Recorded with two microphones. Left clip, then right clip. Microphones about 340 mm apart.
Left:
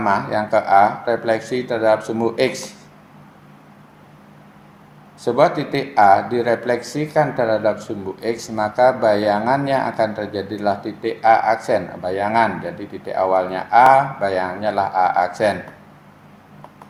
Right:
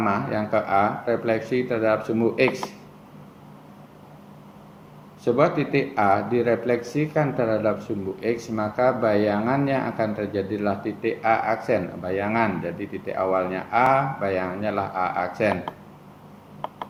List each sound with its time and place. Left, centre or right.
0.0 s speech: left
5.2 s speech: left